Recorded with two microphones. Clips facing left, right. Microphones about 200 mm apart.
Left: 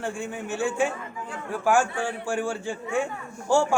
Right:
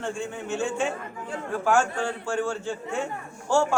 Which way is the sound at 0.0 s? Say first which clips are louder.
Even; 10° left (ahead or behind).